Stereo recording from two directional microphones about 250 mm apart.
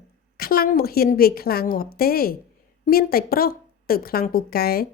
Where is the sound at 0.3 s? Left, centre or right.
Left.